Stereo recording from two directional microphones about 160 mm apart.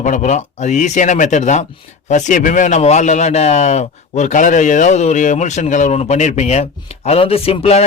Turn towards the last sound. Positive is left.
turn(degrees=40)  # may be behind; listen again after turning